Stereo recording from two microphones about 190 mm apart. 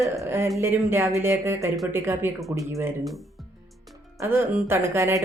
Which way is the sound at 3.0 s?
Centre (ahead or behind).